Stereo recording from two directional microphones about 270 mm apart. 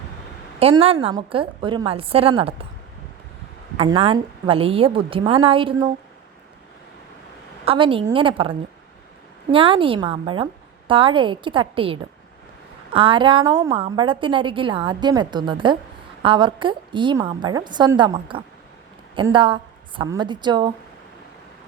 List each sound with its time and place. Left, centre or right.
0.6 s a woman's voice: right
3.8 s a woman's voice: right
7.6 s a woman's voice: centre